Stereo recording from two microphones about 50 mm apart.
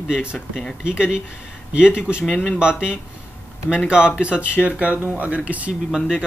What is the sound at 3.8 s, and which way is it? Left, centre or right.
Speech, centre.